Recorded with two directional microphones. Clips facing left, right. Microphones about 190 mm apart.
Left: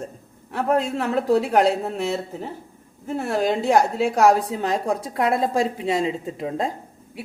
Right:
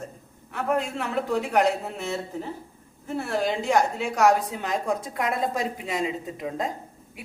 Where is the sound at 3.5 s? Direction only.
35° left (ahead or behind).